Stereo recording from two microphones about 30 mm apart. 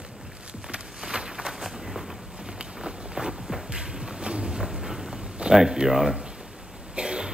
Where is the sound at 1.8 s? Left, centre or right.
Centre.